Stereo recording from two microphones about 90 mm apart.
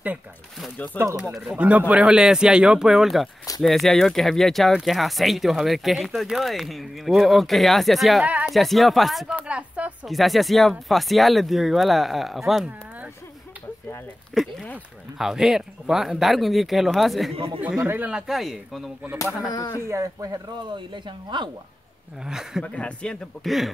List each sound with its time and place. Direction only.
1.0 s speech: 20° left (ahead or behind)
1.5 s speech: 15° right (ahead or behind); by 9.3 s centre (ahead or behind)
9.3 s a sound: 15° right (ahead or behind)
10.0 s speech: centre (ahead or behind)
14.3 s speech: centre (ahead or behind)
17.8 s speech: 20° right (ahead or behind)
18.1 s speech: 5° right (ahead or behind)
19.5 s speech: 45° left (ahead or behind)
19.9 s speech: 40° right (ahead or behind)
20.5 s speech: 60° right (ahead or behind)
22.2 s speech: 5° right (ahead or behind)
22.6 s speech: 10° left (ahead or behind)
23.4 s speech: centre (ahead or behind)